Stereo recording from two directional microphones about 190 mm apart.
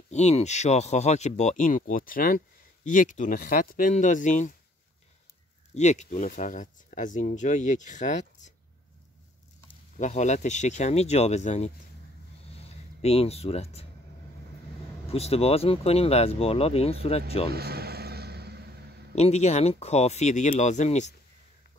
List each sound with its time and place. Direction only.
0.1 s speech: 35° left (ahead or behind)
5.8 s speech: 40° left (ahead or behind)
9.9 s speech: 40° left (ahead or behind)
12.4 s music: 30° left (ahead or behind)
15.0 s speech: 30° left (ahead or behind)
17.5 s vehicle: 55° right (ahead or behind)
19.1 s speech: 35° left (ahead or behind)